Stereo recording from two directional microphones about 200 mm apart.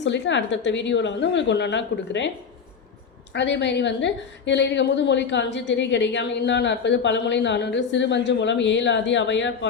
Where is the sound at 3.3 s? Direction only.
60° left (ahead or behind).